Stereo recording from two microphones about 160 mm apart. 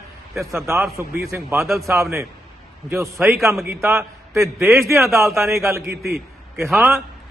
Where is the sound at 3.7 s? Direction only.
15° right (ahead or behind).